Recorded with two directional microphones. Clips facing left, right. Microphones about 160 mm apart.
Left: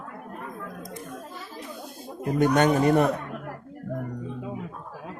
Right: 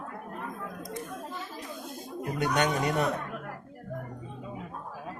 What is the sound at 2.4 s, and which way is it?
Speech, 45° left (ahead or behind).